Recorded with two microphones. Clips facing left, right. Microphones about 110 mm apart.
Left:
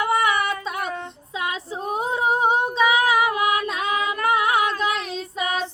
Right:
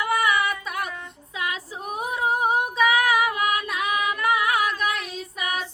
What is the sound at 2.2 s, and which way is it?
Female singing, 25° left (ahead or behind).